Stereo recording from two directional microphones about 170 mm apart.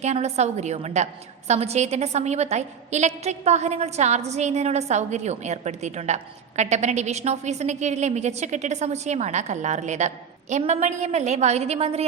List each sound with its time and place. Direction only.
0.0 s a woman's voice: 40° right (ahead or behind)